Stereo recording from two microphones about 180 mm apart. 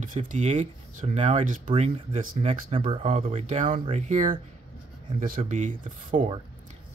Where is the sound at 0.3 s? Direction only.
40° right (ahead or behind).